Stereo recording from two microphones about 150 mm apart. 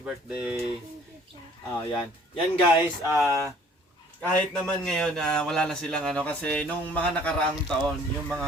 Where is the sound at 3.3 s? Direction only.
20° right (ahead or behind).